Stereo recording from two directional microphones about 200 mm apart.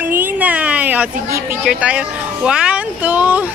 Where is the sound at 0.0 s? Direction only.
10° right (ahead or behind).